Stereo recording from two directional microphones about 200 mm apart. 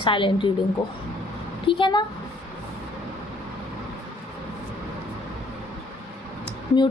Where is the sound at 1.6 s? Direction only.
25° left (ahead or behind).